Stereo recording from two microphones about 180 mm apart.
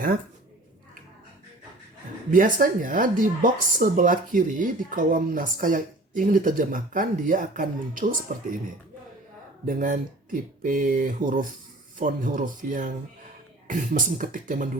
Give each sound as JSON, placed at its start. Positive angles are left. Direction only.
{"t": 2.3, "sound": "speech", "side_deg": -50}
{"t": 9.6, "sound": "speech", "side_deg": -45}